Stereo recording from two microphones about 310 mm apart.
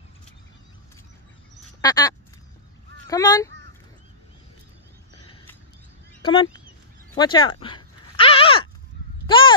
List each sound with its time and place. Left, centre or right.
1.8 s quack: centre
3.1 s speech: centre
6.2 s speech: centre
7.2 s a sound: centre